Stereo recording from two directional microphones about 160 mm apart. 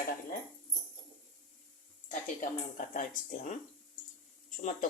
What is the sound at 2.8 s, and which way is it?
Speech, 55° left (ahead or behind).